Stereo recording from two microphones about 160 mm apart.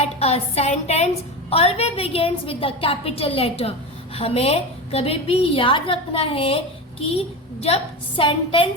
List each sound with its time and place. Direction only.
0.0 s a woman's voice: 40° left (ahead or behind)
7.6 s a woman's voice: 35° left (ahead or behind)